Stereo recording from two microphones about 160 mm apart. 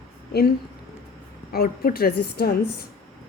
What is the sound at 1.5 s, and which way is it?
A woman's voice, 75° left (ahead or behind).